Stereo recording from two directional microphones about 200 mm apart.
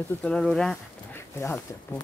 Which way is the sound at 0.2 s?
Centre (ahead or behind).